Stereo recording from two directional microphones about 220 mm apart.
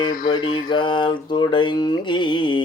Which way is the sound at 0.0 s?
20° left (ahead or behind).